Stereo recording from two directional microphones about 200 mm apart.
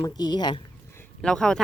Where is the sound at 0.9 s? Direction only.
10° left (ahead or behind).